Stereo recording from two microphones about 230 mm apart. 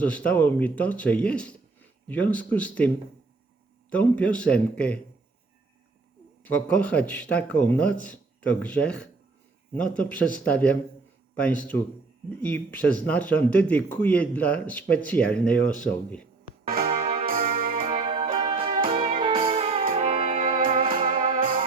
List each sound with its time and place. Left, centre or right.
0.0 s a man's voice: centre
6.4 s a man's voice: centre
16.6 s music: right
17.8 s music: right
20.7 s music: right